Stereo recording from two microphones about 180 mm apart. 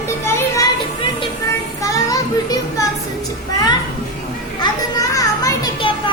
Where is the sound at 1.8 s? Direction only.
20° left (ahead or behind).